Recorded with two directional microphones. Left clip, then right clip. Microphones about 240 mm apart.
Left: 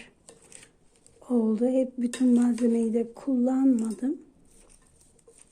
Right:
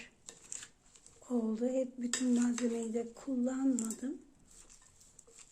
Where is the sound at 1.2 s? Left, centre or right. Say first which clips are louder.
Left 10 dB; left.